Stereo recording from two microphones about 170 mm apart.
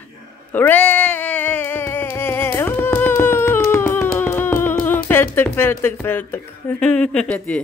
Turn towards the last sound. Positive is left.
turn(degrees=5)  # may be behind; listen again after turning